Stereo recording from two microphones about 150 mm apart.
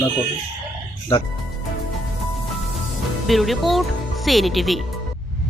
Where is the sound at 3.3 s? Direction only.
Centre (ahead or behind).